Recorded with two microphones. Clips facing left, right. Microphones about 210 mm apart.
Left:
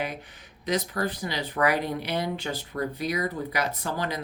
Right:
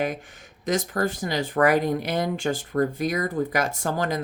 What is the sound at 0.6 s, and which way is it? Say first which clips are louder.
Speech: right 3 dB; 45° right (ahead or behind).